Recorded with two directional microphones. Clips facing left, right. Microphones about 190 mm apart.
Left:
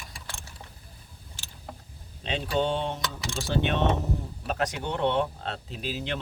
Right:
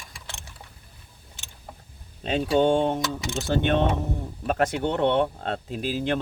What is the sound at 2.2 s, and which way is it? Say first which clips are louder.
Speech: right 6 dB; 45° right (ahead or behind).